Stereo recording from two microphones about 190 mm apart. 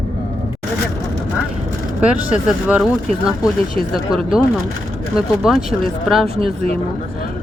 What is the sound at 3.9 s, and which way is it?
Speech, 5° right (ahead or behind).